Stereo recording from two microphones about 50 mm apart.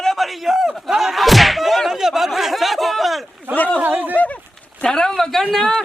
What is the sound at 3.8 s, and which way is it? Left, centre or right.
Speech, right.